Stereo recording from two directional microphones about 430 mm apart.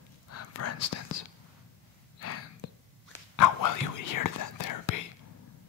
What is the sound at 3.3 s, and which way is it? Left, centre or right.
Whispering, left.